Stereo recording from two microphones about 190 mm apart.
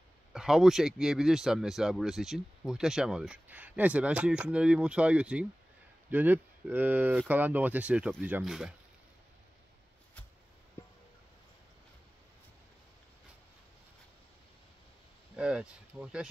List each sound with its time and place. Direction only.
0.3 s speech: 5° right (ahead or behind)
15.3 s speech: 5° right (ahead or behind)